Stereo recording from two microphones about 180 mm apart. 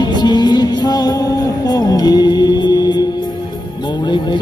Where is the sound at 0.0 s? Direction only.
25° left (ahead or behind).